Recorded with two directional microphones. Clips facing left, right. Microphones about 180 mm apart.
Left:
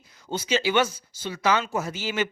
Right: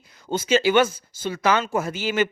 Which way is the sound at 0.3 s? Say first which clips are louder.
Right 5 dB; 50° right (ahead or behind).